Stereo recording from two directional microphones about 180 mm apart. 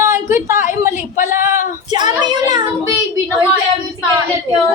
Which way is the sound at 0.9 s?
45° left (ahead or behind).